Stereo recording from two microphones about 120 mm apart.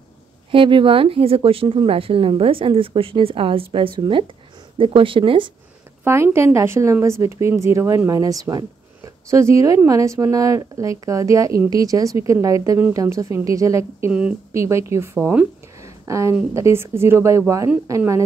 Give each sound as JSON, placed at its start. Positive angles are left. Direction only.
{"t": 0.5, "sound": "speech", "side_deg": -45}
{"t": 6.0, "sound": "speech", "side_deg": -20}